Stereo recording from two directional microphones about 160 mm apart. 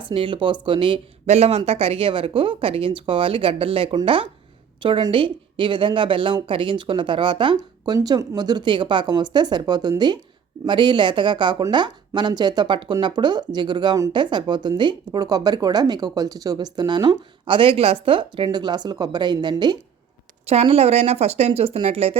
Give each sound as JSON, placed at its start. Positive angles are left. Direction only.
{"t": 0.0, "sound": "speech", "side_deg": -30}
{"t": 20.5, "sound": "speech", "side_deg": -40}